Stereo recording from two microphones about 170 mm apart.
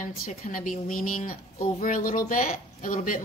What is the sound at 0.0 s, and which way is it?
A woman's voice, 55° left (ahead or behind).